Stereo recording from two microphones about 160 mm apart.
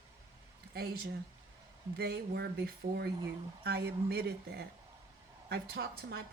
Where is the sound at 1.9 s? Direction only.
90° right.